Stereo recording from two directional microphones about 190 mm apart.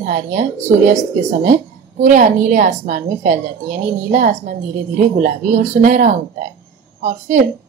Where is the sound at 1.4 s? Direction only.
40° right (ahead or behind).